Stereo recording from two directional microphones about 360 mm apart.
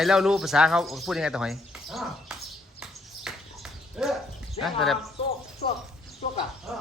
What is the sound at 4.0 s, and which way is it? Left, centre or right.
Dog, centre.